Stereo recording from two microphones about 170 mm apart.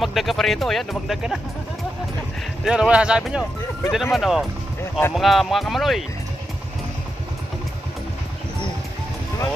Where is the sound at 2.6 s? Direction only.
5° right (ahead or behind).